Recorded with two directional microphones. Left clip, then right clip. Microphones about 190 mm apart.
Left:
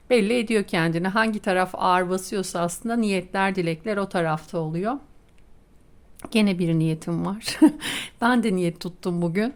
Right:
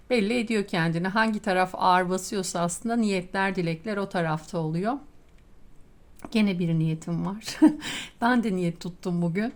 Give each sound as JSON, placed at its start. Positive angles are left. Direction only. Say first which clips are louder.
{"t": 0.1, "sound": "a woman's voice", "louder": "left 5 dB", "side_deg": 25}
{"t": 6.1, "sound": "a woman's voice", "louder": "left 4 dB", "side_deg": 25}